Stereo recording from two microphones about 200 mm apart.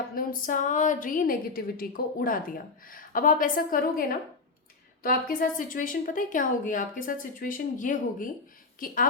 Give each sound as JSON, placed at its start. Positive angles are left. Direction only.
{"t": 0.1, "sound": "a woman's voice", "side_deg": 45}